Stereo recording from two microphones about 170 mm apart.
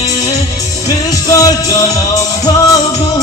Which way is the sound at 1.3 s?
20° left (ahead or behind).